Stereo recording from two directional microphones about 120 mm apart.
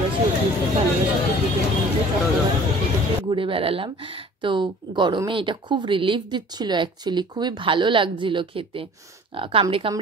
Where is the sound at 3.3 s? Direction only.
45° right (ahead or behind).